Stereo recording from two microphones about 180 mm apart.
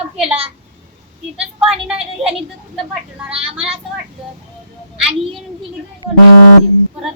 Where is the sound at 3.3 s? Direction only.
30° right (ahead or behind).